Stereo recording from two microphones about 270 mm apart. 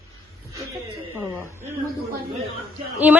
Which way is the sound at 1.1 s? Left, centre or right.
Centre.